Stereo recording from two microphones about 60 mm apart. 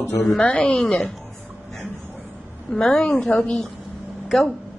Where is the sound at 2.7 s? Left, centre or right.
Centre.